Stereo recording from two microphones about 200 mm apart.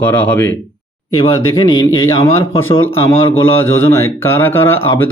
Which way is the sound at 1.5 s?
20° left (ahead or behind).